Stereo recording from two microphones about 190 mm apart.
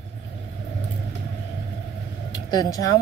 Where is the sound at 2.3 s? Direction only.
20° left (ahead or behind).